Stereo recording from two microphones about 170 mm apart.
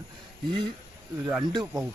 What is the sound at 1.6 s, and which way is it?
Speech, 10° right (ahead or behind).